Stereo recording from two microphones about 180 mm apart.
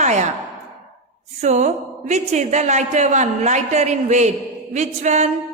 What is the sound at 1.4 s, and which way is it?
A man's voice, 40° right (ahead or behind).